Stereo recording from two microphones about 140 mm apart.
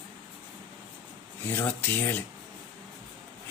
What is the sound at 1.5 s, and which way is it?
Speech, 15° left (ahead or behind).